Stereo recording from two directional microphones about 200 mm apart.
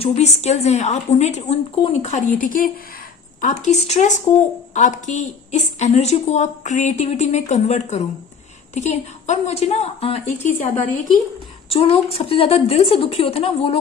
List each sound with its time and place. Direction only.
0.0 s a woman's voice: 35° left (ahead or behind)